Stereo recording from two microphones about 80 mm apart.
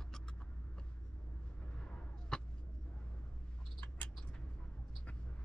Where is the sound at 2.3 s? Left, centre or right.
Centre.